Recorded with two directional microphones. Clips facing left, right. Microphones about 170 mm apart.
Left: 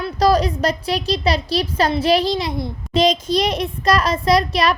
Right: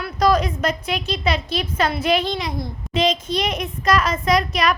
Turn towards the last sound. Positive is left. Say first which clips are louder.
# left 3 dB
turn(degrees=35)  # may be behind; listen again after turning